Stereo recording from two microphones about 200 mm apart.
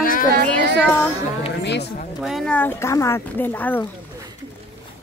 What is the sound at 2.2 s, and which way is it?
Speech, centre (ahead or behind).